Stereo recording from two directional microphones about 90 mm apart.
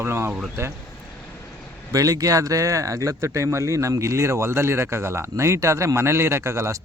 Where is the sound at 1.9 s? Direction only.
40° right (ahead or behind).